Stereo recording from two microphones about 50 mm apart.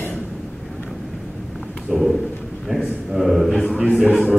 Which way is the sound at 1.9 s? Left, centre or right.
Centre.